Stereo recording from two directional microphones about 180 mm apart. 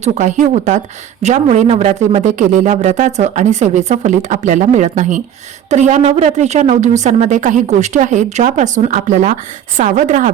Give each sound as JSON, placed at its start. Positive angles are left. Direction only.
{"t": 0.0, "sound": "a man's voice", "side_deg": -40}